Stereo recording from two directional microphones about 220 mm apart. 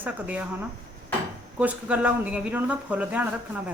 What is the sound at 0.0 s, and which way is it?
Speech, 5° right (ahead or behind).